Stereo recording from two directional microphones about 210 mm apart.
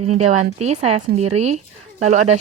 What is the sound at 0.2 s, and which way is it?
A woman's voice, 30° right (ahead or behind).